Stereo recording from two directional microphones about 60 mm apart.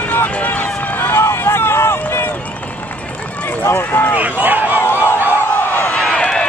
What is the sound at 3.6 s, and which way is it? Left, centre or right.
Speech, left.